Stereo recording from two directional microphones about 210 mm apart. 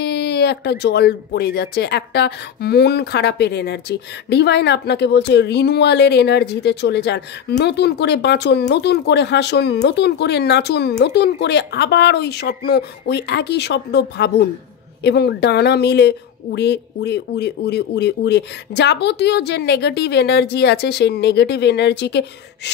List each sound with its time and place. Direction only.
0.0 s speech: 50° left (ahead or behind)